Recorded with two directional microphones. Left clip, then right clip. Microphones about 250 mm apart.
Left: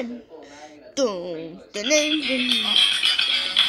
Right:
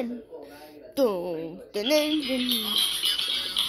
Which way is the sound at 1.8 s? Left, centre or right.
Centre.